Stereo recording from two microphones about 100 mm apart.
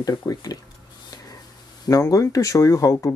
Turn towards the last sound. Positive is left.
turn(degrees=35)  # may be behind; listen again after turning